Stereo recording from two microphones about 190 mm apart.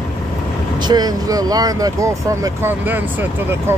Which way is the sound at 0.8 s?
20° right (ahead or behind).